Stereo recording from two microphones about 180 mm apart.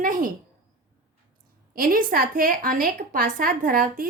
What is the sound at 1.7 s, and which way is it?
Speech, 50° right (ahead or behind).